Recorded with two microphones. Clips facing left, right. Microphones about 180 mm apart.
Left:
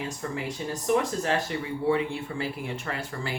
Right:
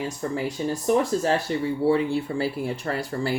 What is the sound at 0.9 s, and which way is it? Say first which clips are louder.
Speech: right 3 dB; 35° right (ahead or behind).